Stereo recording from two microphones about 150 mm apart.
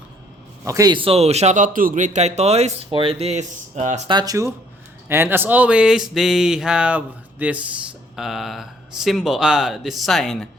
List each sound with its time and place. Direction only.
0.6 s a man's voice: 20° right (ahead or behind)
0.9 s speech: 40° right (ahead or behind)
4.1 s speech: 25° right (ahead or behind); by 10.5 s centre (ahead or behind)